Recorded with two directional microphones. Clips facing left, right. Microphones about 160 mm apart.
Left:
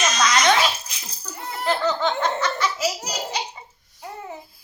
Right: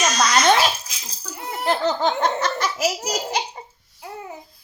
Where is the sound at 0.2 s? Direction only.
35° right (ahead or behind).